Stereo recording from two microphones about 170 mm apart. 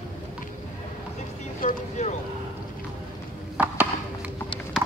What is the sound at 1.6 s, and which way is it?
Vehicle, 45° left (ahead or behind).